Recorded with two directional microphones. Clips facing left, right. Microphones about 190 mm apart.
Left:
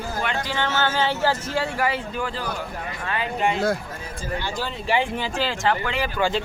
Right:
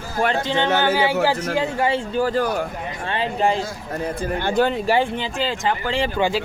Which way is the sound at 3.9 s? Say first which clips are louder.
Right 7 dB; 60° right (ahead or behind).